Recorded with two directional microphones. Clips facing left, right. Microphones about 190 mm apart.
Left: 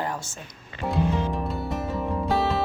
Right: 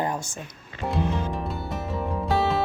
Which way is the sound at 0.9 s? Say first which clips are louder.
Left 2 dB; centre (ahead or behind).